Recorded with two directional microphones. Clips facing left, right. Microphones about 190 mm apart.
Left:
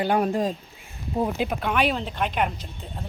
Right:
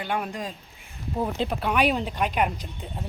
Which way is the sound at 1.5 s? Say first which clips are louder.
Right 3 dB; 5° right (ahead or behind).